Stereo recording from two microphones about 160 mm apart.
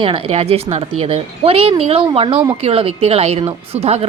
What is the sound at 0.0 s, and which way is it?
Speech, 35° right (ahead or behind).